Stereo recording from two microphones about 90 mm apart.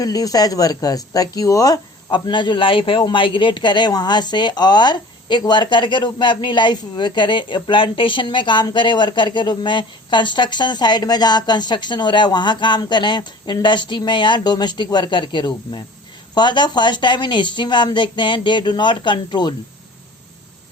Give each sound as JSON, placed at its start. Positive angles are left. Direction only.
{"t": 0.0, "sound": "speech", "side_deg": 40}
{"t": 2.0, "sound": "speech", "side_deg": 60}
{"t": 3.0, "sound": "speech", "side_deg": 65}